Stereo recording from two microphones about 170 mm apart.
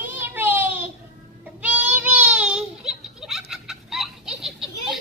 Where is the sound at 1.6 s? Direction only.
10° right (ahead or behind).